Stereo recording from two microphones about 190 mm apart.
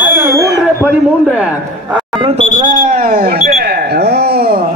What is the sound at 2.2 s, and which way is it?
Speech, 30° right (ahead or behind).